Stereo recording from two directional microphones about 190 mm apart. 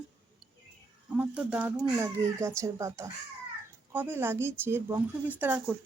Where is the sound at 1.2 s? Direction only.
5° right (ahead or behind).